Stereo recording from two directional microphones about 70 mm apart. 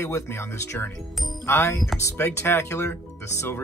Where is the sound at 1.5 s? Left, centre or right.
Left.